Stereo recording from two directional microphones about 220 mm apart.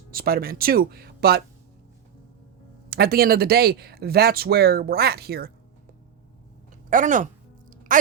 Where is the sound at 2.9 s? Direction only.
45° right (ahead or behind).